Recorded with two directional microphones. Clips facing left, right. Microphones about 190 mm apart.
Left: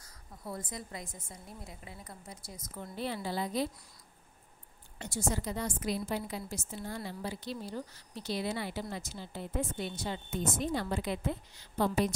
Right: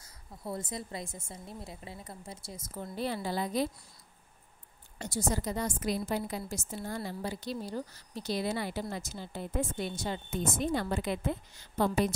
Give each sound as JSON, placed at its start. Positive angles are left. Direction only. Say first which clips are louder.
{"t": 0.0, "sound": "a woman's voice", "louder": "right 3 dB", "side_deg": -25}
{"t": 4.9, "sound": "a woman's voice", "louder": "right 2 dB", "side_deg": -40}